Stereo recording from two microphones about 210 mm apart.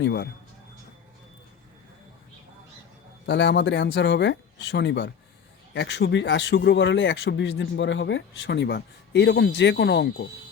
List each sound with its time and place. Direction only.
0.0 s speech: 55° left (ahead or behind)
3.2 s speech: 55° left (ahead or behind)